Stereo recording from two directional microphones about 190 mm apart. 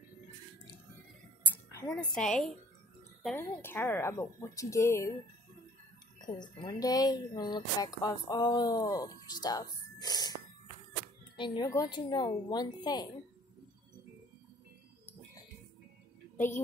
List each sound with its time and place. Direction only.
1.4 s a sound: 15° left (ahead or behind)
2.0 s a woman's voice: 5° left (ahead or behind)
6.6 s speech: 20° left (ahead or behind)
11.3 s speech: 25° left (ahead or behind)
16.3 s a woman's voice: 10° left (ahead or behind)